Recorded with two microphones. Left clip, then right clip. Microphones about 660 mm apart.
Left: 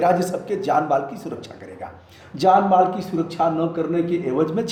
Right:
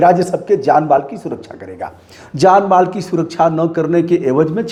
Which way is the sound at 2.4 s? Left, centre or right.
Right.